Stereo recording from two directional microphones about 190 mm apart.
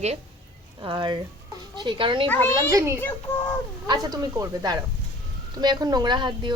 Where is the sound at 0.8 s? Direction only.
25° right (ahead or behind).